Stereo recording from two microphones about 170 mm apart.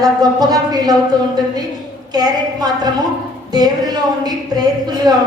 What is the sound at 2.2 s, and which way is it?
A woman's voice, 25° right (ahead or behind).